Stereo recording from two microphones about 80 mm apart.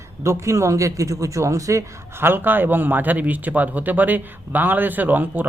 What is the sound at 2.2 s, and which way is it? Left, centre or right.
A man's voice, right.